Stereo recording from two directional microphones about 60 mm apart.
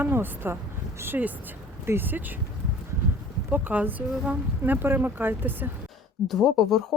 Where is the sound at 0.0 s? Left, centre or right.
Right.